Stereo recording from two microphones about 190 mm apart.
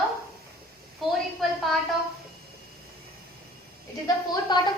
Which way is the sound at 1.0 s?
Centre (ahead or behind).